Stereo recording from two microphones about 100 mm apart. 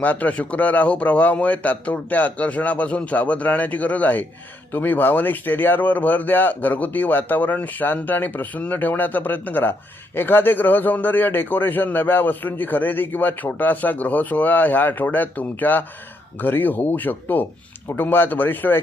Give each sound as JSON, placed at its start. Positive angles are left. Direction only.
{"t": 0.0, "sound": "a man's voice", "side_deg": 15}